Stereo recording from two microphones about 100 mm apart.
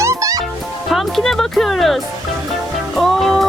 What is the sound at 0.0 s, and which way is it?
Music, 30° right (ahead or behind).